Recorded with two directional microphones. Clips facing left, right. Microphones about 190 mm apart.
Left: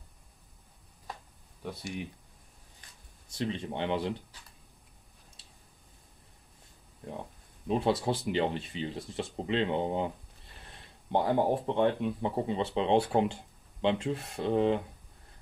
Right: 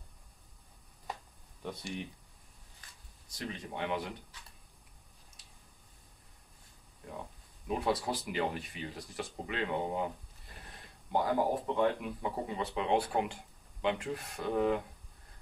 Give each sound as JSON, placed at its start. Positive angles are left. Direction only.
{"t": 1.6, "sound": "speech", "side_deg": 5}
{"t": 3.3, "sound": "speech", "side_deg": 25}
{"t": 5.4, "sound": "a sound", "side_deg": 30}
{"t": 7.6, "sound": "speech", "side_deg": 25}
{"t": 11.1, "sound": "speech", "side_deg": 30}